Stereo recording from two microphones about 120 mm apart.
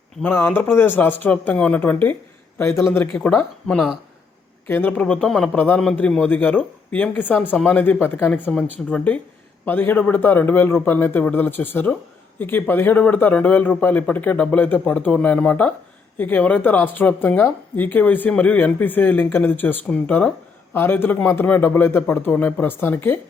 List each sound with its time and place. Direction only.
0.2 s a man's voice: 20° left (ahead or behind)